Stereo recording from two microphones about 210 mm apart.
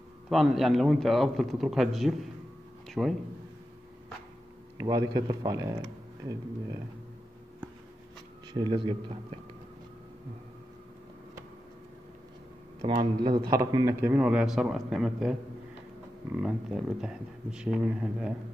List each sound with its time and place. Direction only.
0.3 s a man's voice: centre (ahead or behind)
4.7 s speech: 15° right (ahead or behind)
8.5 s a man's voice: 20° right (ahead or behind)
13.2 s a man's voice: 20° right (ahead or behind)